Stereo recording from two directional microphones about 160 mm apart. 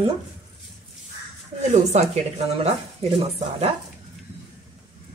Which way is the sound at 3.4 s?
35° right (ahead or behind).